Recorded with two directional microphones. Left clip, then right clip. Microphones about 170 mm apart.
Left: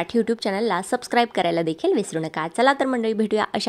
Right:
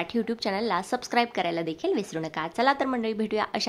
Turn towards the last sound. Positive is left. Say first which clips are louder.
# left 5 dB
turn(degrees=35)  # may be behind; listen again after turning